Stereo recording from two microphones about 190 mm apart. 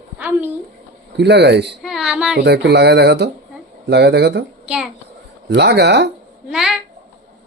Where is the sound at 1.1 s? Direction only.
65° right (ahead or behind).